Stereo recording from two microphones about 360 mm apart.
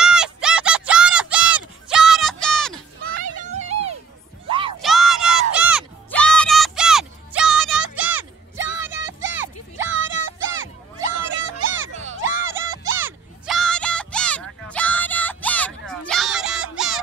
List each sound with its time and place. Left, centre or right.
0.0 s a sound: centre
1.9 s music: centre
3.3 s children playing: centre
4.5 s music: centre
4.7 s crowd: centre
8.7 s music: centre
9.3 s a sound: centre
9.8 s music: right
12.9 s a sound: centre